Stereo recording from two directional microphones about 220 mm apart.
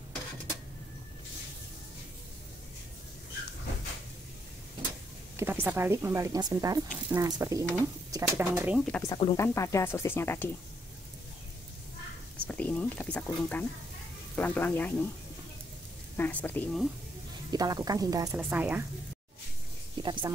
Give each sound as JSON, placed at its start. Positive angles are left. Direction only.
{"t": 5.4, "sound": "speech", "side_deg": -10}
{"t": 9.0, "sound": "speech", "side_deg": 15}
{"t": 12.4, "sound": "speech", "side_deg": 5}
{"t": 16.2, "sound": "speech", "side_deg": 5}
{"t": 17.5, "sound": "speech", "side_deg": -15}
{"t": 20.0, "sound": "speech", "side_deg": -20}